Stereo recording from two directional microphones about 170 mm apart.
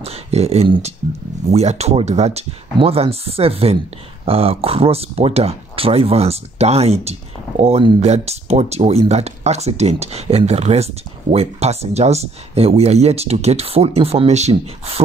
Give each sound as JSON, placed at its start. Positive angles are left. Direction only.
{"t": 0.0, "sound": "speech", "side_deg": -40}